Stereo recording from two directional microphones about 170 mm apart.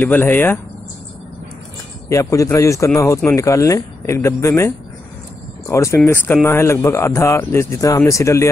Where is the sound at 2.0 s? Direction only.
20° left (ahead or behind).